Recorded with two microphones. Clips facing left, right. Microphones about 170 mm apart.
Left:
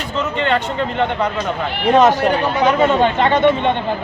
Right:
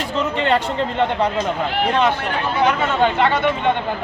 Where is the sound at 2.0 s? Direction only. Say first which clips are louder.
Left 9 dB; 40° left (ahead or behind).